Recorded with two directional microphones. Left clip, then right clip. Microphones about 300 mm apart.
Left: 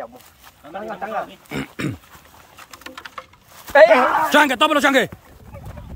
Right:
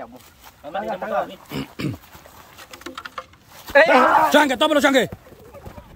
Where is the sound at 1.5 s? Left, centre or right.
Centre.